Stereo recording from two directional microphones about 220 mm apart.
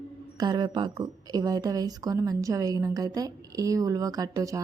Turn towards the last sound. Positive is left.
turn(degrees=-15)  # may be behind; listen again after turning